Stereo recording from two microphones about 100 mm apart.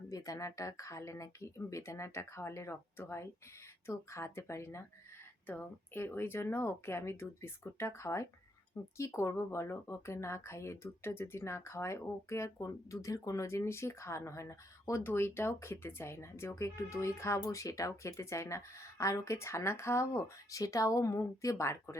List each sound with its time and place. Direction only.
0.1 s speech: 35° left (ahead or behind)